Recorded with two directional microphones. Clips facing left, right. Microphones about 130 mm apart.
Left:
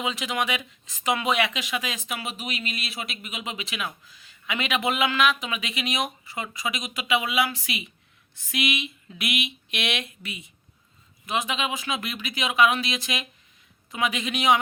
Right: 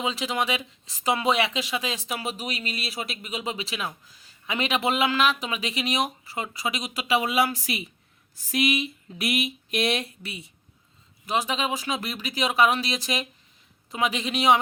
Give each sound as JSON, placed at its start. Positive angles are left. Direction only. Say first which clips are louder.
{"t": 0.0, "sound": "speech", "louder": "right 1 dB", "side_deg": -30}